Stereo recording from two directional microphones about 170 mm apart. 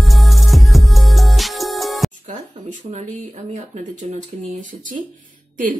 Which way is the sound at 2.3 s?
40° right (ahead or behind).